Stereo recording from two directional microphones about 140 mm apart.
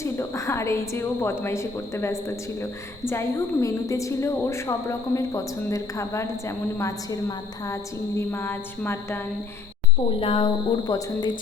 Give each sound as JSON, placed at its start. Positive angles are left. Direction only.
{"t": 0.0, "sound": "a woman's voice", "side_deg": 20}
{"t": 10.2, "sound": "speech", "side_deg": 40}